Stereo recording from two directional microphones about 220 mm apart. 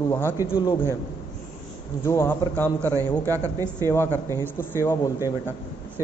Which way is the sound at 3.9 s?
10° left (ahead or behind).